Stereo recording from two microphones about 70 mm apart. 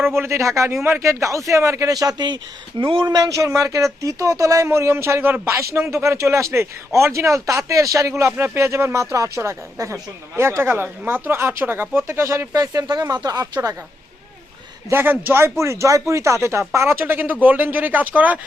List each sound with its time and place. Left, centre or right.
0.0 s speech: right
1.9 s speech: right
3.2 s speech: right
12.5 s speech: right
14.8 s speech: right